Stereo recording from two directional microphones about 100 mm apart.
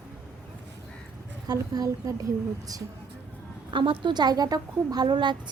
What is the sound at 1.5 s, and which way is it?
Speech, 40° right (ahead or behind).